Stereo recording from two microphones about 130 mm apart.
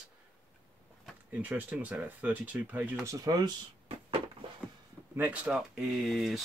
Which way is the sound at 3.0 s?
25° right (ahead or behind).